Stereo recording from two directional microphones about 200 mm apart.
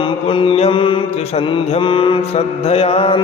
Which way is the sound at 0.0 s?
25° left (ahead or behind).